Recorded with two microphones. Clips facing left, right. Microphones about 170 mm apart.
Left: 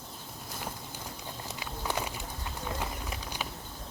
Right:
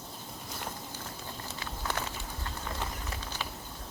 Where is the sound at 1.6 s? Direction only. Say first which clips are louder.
Left 2 dB; 15° left (ahead or behind).